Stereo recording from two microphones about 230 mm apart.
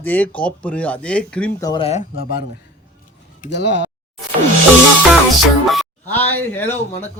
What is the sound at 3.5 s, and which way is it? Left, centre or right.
Speech, left.